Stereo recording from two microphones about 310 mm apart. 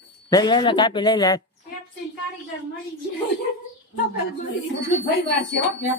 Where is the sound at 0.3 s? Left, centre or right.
Centre.